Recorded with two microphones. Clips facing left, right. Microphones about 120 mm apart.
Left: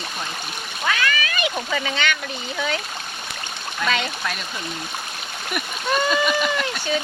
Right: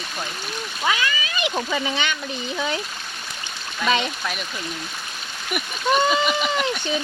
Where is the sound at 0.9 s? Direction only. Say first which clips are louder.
Left 1 dB; 20° right (ahead or behind).